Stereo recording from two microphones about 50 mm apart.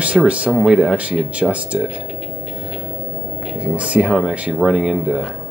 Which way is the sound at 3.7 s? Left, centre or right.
Right.